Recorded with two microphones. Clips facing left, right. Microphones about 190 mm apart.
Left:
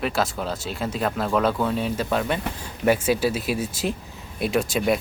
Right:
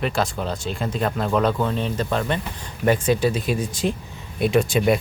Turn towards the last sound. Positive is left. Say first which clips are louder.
# right 3 dB
turn(degrees=0)  # may be behind; listen again after turning